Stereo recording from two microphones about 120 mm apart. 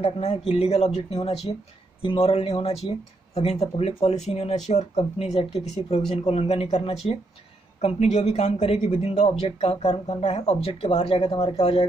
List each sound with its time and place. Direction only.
0.0 s speech: 60° left (ahead or behind)
2.0 s speech: 50° left (ahead or behind); by 9.3 s 70° left (ahead or behind)
9.3 s speech: 55° left (ahead or behind)